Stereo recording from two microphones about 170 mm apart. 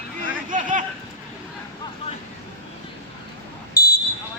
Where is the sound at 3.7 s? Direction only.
70° left (ahead or behind).